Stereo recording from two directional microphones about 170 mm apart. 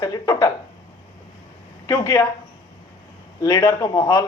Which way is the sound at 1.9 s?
20° left (ahead or behind).